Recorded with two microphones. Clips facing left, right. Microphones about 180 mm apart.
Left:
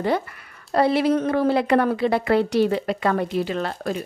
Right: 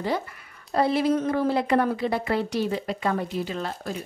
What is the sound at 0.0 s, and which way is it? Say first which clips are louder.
A woman's voice: left 5 dB; 65° left (ahead or behind).